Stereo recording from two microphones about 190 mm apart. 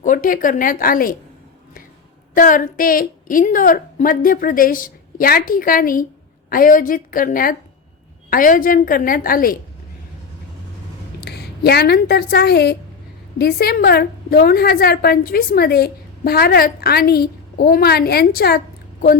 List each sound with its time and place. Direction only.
0.0 s speech: 45° left (ahead or behind)
2.3 s a woman's voice: 45° left (ahead or behind)
11.2 s a woman's voice: 60° left (ahead or behind)